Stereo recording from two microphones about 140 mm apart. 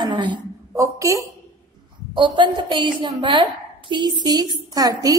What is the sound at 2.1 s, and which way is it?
A woman's voice, 35° right (ahead or behind).